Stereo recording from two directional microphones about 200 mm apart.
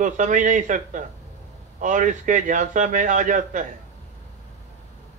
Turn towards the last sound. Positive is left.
turn(degrees=-40)  # may be behind; listen again after turning